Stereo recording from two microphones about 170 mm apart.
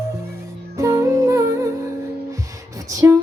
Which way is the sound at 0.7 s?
20° right (ahead or behind).